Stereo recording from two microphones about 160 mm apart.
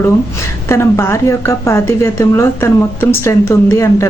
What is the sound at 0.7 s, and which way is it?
A woman's voice, 15° left (ahead or behind).